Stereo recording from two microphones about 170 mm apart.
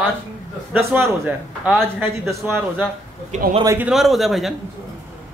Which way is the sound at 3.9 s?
Centre (ahead or behind).